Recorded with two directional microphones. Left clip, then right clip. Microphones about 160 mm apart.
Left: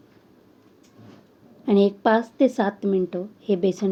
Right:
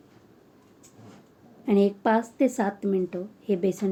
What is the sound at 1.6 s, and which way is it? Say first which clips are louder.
Speech: left 4 dB; 20° left (ahead or behind).